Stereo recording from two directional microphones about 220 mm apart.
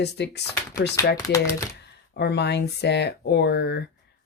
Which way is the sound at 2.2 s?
50° left (ahead or behind).